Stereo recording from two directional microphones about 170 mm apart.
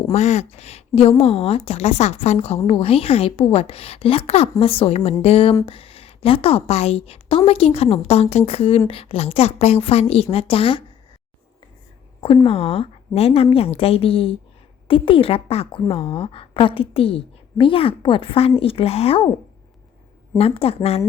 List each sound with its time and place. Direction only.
0.1 s a woman's voice: 40° left (ahead or behind)
12.5 s a woman's voice: 35° left (ahead or behind)
20.4 s a woman's voice: 35° left (ahead or behind)